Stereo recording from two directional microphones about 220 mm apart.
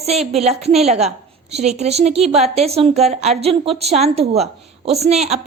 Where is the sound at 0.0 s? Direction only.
30° right (ahead or behind).